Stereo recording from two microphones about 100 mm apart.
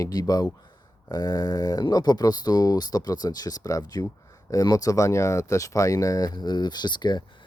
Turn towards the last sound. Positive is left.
turn(degrees=45)  # may be behind; listen again after turning